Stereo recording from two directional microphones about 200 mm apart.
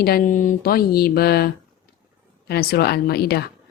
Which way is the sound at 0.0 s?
45° left (ahead or behind).